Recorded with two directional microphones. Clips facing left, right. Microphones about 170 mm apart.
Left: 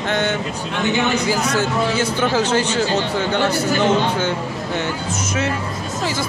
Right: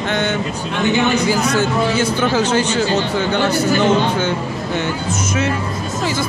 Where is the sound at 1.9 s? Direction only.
30° left (ahead or behind).